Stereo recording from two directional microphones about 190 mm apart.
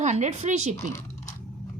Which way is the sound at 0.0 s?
40° right (ahead or behind).